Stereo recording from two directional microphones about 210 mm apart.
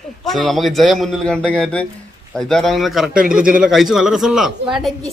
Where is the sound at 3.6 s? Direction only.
Centre (ahead or behind).